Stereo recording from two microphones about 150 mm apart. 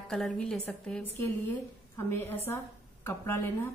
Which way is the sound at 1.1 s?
15° left (ahead or behind).